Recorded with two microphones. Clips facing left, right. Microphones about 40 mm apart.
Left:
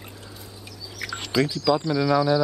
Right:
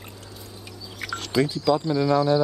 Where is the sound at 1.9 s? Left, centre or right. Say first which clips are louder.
Even; centre.